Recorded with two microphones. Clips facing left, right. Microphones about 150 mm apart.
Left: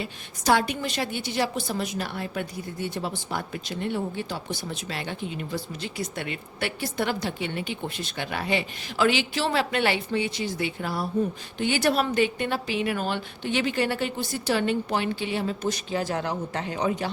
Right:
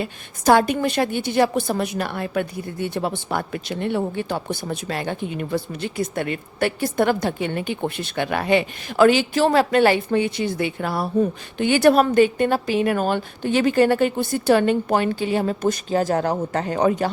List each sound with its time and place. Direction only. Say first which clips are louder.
0.0 s a woman's voice: right 7 dB; 50° right (ahead or behind)